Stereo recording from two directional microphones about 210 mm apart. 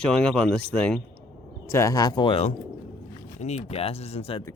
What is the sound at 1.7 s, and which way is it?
Speech, 15° left (ahead or behind).